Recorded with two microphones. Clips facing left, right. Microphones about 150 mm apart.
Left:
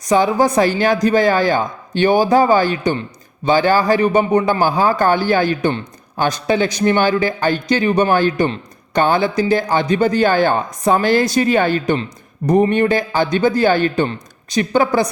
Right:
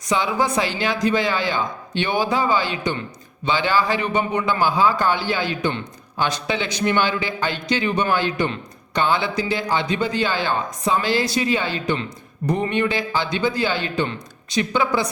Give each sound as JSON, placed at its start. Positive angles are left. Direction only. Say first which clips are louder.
{"t": 0.0, "sound": "a man's voice", "louder": "left 7 dB", "side_deg": 40}